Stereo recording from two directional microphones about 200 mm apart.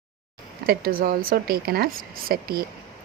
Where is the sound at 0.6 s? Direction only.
50° right (ahead or behind).